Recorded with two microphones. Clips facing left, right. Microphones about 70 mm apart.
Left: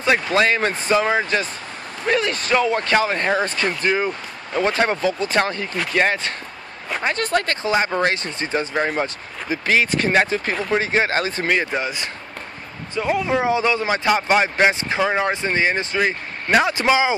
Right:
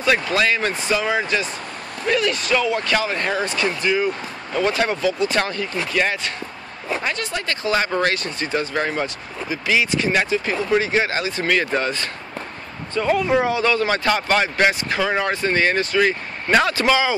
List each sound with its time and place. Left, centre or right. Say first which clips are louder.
0.0 s speech: left 1 dB; left
7.6 s speech: right 4 dB; left
9.0 s speech: even; left
11.4 s speech: right 1 dB; centre
16.4 s a man's voice: even; centre
16.7 s speech: left 1 dB; left